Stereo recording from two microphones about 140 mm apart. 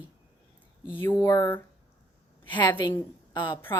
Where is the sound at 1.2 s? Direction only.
25° left (ahead or behind).